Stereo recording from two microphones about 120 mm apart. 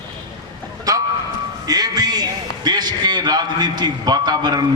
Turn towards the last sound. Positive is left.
turn(degrees=-35)  # may be behind; listen again after turning